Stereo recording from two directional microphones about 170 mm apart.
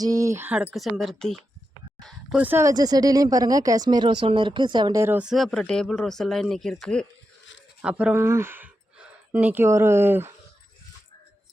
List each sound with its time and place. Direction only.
0.0 s speech: 20° right (ahead or behind); by 1.4 s centre (ahead or behind)
2.0 s a sound: centre (ahead or behind)
2.4 s speech: 15° right (ahead or behind); by 7.1 s 5° left (ahead or behind)
7.8 s speech: 5° right (ahead or behind)